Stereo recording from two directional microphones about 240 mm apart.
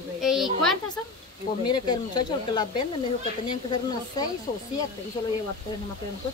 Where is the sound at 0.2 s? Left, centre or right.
Centre.